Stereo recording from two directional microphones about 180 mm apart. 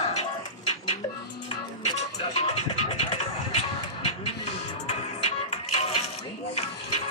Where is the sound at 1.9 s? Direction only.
35° left (ahead or behind).